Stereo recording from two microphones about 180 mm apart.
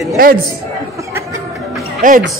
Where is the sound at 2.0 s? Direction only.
50° right (ahead or behind).